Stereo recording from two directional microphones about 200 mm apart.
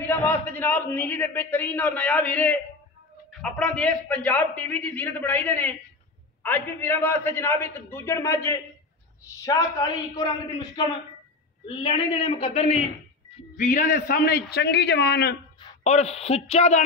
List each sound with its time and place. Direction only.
0.0 s a man's voice: 10° left (ahead or behind); by 15.3 s 55° left (ahead or behind)
15.8 s a man's voice: 35° left (ahead or behind)